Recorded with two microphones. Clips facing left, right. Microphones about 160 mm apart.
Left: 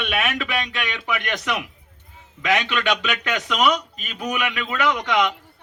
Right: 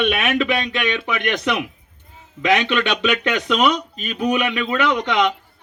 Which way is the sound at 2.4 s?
20° right (ahead or behind).